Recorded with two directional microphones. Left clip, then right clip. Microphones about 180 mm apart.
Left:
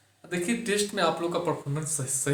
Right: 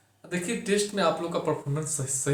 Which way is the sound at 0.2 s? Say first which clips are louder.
Left 1 dB; 20° left (ahead or behind).